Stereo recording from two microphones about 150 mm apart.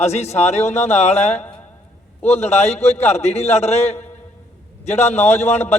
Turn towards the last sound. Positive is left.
turn(degrees=45)  # may be behind; listen again after turning